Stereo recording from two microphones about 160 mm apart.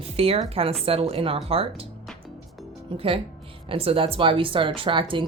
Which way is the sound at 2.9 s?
35° right (ahead or behind).